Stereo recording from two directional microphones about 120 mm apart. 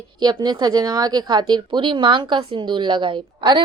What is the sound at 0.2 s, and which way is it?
Speech, 35° right (ahead or behind).